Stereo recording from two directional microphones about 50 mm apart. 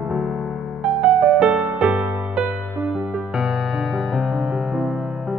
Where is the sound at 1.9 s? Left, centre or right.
Centre.